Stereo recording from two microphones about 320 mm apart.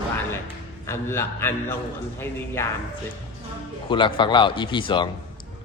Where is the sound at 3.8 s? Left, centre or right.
Centre.